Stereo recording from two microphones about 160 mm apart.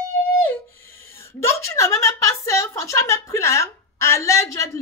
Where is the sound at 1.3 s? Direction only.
15° left (ahead or behind).